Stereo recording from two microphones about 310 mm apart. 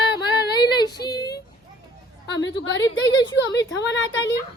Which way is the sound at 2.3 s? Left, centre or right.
Left.